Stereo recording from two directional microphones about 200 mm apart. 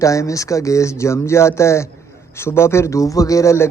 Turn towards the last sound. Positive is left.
turn(degrees=15)  # may be behind; listen again after turning